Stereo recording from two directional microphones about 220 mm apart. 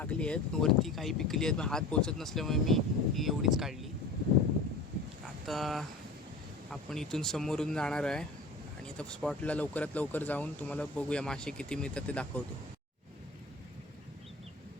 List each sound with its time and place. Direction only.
0.0 s speech: 5° left (ahead or behind)
5.5 s speech: centre (ahead or behind)